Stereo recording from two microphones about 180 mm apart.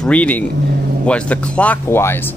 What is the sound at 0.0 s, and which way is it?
Speech, 5° left (ahead or behind).